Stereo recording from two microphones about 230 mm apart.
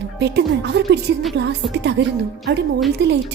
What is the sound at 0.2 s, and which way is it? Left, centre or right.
Speech, right.